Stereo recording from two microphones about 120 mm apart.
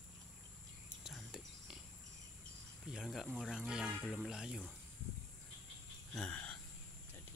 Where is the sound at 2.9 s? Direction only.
Centre (ahead or behind).